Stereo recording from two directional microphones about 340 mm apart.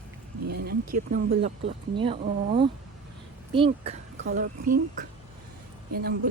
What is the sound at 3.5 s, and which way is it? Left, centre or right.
Speech, centre.